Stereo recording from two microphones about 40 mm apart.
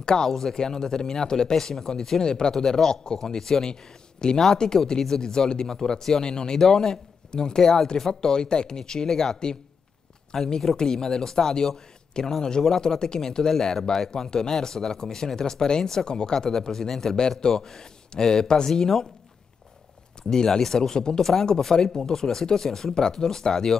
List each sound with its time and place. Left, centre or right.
0.0 s speech: centre
20.2 s speech: centre